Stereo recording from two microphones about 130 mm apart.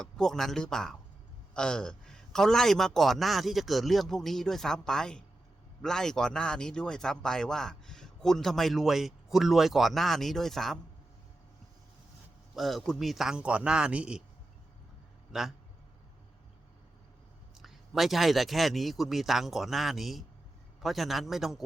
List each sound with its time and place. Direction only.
0.0 s speech: 5° left (ahead or behind)
12.5 s speech: centre (ahead or behind)
15.3 s speech: 5° right (ahead or behind)
17.6 s speech: centre (ahead or behind)